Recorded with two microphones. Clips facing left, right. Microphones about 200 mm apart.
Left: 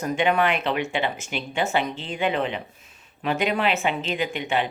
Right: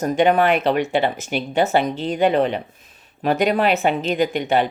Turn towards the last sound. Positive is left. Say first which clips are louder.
# right 7 dB
turn(degrees=-40)  # may be behind; listen again after turning